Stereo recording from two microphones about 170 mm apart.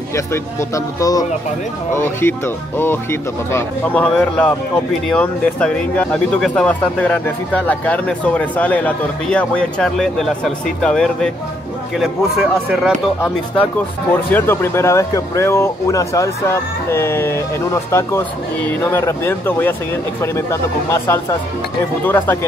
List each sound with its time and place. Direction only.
0.1 s speech: 15° left (ahead or behind); by 13.3 s centre (ahead or behind)
14.3 s speech: 15° left (ahead or behind)
20.9 s speech: 15° left (ahead or behind)